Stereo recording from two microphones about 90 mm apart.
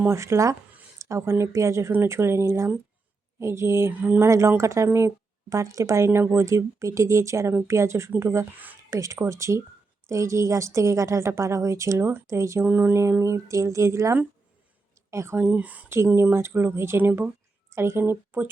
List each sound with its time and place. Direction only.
0.1 s a woman's voice: 35° right (ahead or behind)
12.6 s speech: 20° right (ahead or behind)
13.0 s a woman's voice: 30° right (ahead or behind)
15.4 s speech: 15° right (ahead or behind)
15.9 s speech: 30° right (ahead or behind)